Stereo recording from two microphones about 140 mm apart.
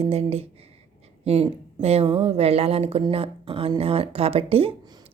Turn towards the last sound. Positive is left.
turn(degrees=-45)  # may be behind; listen again after turning